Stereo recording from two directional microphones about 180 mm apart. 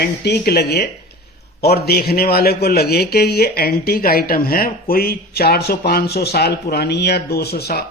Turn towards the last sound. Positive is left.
turn(degrees=60)  # may be behind; listen again after turning